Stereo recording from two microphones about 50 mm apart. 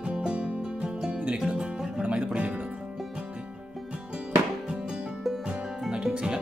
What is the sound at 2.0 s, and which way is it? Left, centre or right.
Music, right.